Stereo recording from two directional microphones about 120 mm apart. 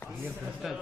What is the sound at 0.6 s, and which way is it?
Speech, 5° right (ahead or behind).